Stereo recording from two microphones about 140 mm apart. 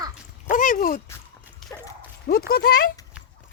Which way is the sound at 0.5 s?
75° left (ahead or behind).